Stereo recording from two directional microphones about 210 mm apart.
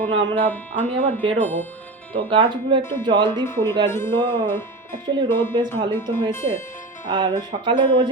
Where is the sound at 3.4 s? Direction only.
10° left (ahead or behind).